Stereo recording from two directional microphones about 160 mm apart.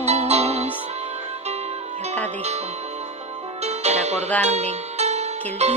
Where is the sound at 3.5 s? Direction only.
40° right (ahead or behind).